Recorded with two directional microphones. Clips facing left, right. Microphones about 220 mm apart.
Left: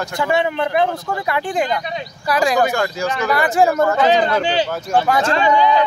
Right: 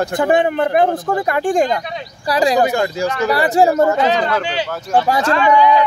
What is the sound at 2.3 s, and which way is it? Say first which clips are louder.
A man's voice: right 2 dB; 35° right (ahead or behind).